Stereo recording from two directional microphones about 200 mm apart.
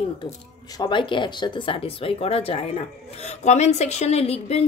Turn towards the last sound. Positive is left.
turn(degrees=30)  # may be behind; listen again after turning